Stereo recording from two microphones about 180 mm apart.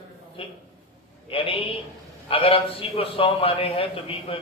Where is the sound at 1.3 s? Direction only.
30° left (ahead or behind).